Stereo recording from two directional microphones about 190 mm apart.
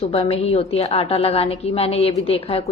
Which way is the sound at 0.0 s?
30° left (ahead or behind).